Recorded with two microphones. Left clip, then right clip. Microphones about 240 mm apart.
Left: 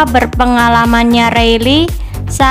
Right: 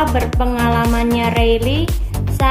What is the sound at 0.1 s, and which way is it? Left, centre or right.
A woman's voice, left.